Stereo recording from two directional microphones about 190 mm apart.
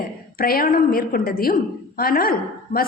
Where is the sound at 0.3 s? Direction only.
50° left (ahead or behind).